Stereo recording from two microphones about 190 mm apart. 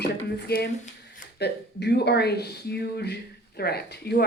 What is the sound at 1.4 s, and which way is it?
Speech, 60° left (ahead or behind).